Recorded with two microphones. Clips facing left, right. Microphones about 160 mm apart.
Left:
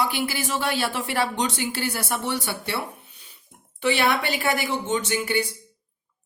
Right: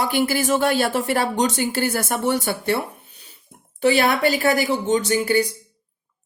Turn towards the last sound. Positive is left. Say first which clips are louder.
# right 6 dB
turn(degrees=-40)  # may be behind; listen again after turning